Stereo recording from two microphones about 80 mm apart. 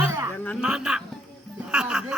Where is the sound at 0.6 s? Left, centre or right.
Centre.